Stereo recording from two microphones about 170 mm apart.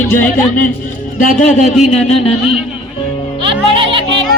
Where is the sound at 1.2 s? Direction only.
50° left (ahead or behind).